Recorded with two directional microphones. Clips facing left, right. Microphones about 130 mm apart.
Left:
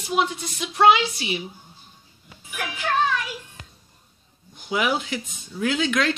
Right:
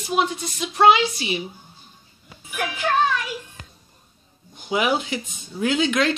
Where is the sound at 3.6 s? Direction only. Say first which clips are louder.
Right 2 dB; 40° right (ahead or behind).